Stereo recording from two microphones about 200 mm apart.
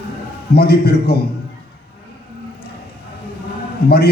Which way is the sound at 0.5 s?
55° left (ahead or behind).